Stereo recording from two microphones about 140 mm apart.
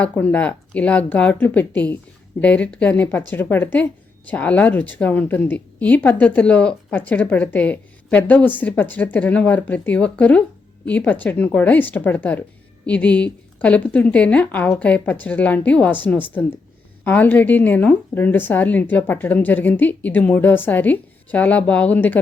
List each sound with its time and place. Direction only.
0.0 s a woman's voice: 10° left (ahead or behind)